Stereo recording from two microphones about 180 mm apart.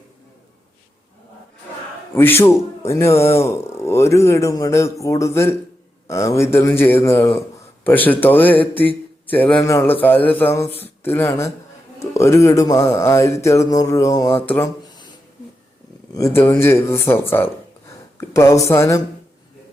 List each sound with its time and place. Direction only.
2.1 s speech: 15° left (ahead or behind)
16.1 s speech: 15° left (ahead or behind)